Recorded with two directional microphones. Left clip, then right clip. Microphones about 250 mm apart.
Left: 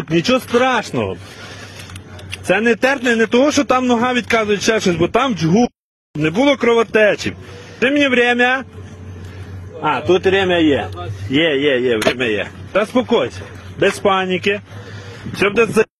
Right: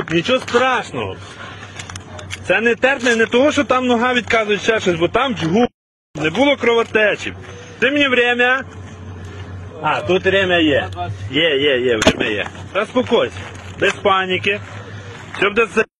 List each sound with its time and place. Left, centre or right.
0.1 s a man's voice: left
2.4 s a man's voice: left
9.9 s a man's voice: left